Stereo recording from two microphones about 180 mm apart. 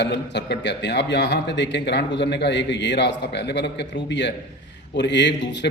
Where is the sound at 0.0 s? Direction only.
70° left (ahead or behind).